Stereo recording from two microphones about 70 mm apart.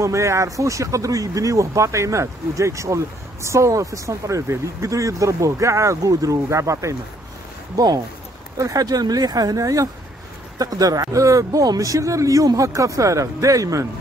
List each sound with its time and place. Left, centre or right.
0.0 s speech: right
7.7 s speech: right